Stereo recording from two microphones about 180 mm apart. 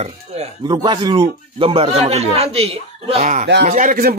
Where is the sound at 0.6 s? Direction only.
25° right (ahead or behind); by 4.1 s 50° right (ahead or behind).